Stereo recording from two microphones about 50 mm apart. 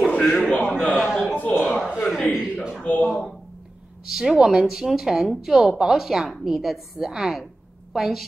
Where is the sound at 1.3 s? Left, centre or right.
Left.